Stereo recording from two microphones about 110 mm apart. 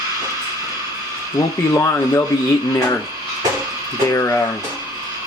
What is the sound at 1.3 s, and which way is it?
Speech, 30° left (ahead or behind).